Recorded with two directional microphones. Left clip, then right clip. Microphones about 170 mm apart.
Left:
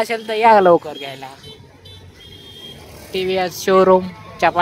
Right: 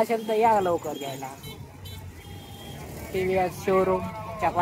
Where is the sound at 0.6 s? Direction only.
40° left (ahead or behind).